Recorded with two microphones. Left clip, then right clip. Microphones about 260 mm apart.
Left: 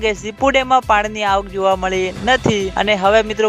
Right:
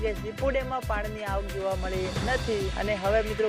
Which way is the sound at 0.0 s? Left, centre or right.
Left.